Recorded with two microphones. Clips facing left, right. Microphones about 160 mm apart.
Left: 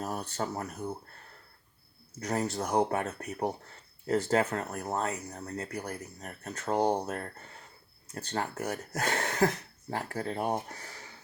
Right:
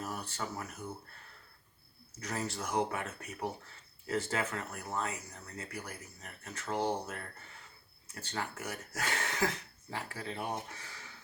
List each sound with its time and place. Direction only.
0.3 s speech: 35° left (ahead or behind)
2.3 s speech: 40° left (ahead or behind)